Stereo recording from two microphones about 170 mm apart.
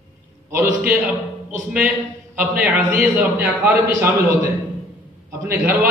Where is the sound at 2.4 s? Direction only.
5° right (ahead or behind).